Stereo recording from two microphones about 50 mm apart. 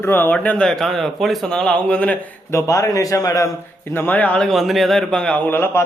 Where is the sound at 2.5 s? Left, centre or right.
Left.